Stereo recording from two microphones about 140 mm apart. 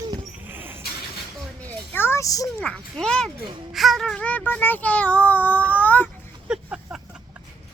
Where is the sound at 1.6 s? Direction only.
15° left (ahead or behind).